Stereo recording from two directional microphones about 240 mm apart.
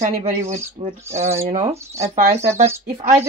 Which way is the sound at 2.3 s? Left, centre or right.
Centre.